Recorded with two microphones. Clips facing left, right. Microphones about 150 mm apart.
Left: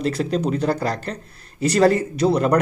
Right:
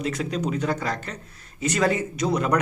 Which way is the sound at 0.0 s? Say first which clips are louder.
Left 5 dB; 35° left (ahead or behind).